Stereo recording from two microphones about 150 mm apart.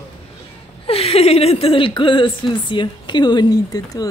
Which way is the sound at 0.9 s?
40° left (ahead or behind).